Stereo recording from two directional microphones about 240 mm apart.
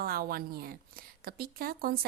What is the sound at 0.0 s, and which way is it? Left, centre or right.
A woman's voice, right.